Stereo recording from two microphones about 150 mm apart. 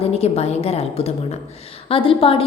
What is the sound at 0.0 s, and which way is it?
A woman's voice, 45° left (ahead or behind).